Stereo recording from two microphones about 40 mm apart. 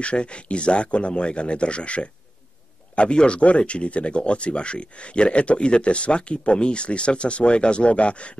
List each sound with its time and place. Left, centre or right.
0.0 s speech: left